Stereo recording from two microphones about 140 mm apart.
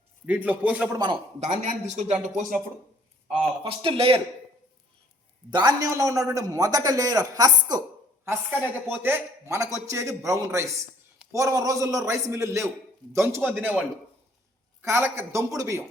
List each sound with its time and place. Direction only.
0.3 s speech: 10° right (ahead or behind)
1.4 s speech: 60° right (ahead or behind)
3.2 s speech: 40° right (ahead or behind)
5.5 s a man's voice: 30° right (ahead or behind)
8.2 s a man's voice: 15° right (ahead or behind)